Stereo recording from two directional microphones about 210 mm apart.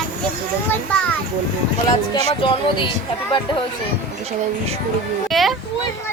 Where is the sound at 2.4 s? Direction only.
25° left (ahead or behind).